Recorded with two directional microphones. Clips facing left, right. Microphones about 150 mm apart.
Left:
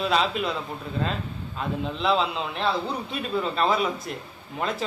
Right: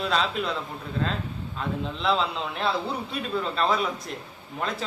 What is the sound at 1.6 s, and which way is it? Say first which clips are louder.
A man's voice: left 2 dB; centre (ahead or behind).